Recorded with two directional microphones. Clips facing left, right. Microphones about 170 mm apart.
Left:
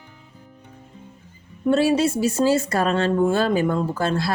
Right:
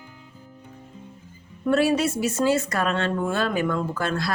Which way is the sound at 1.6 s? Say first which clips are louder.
Left 2 dB; 30° left (ahead or behind).